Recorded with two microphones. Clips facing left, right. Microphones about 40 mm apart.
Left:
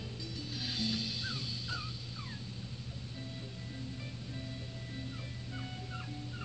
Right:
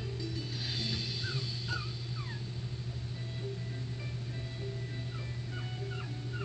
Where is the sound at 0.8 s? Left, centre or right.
Right.